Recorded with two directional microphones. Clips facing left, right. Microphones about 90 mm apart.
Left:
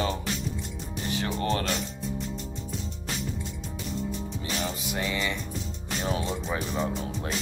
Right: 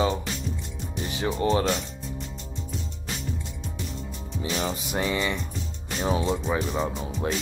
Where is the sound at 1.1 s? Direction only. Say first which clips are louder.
Right 3 dB; 20° right (ahead or behind).